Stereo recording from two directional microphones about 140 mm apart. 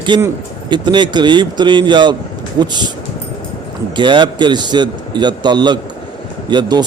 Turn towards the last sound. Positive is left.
turn(degrees=-30)  # may be behind; listen again after turning